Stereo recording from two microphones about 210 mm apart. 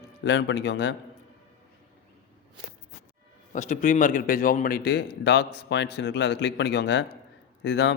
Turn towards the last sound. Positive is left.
turn(degrees=55)  # may be behind; listen again after turning